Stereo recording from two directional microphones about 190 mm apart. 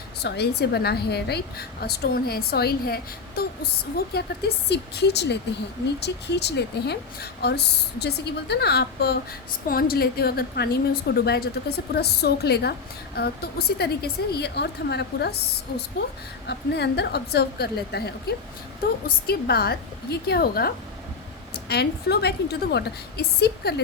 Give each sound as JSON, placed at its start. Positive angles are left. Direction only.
{"t": 0.2, "sound": "a woman's voice", "side_deg": 60}
{"t": 16.5, "sound": "a woman's voice", "side_deg": 60}